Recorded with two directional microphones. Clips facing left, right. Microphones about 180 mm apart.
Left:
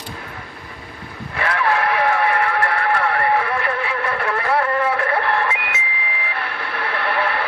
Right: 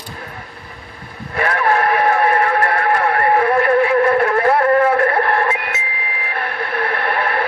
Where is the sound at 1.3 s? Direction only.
45° right (ahead or behind).